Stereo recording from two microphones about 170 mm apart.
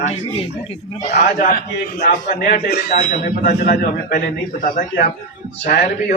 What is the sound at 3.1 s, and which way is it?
Speech, 50° left (ahead or behind).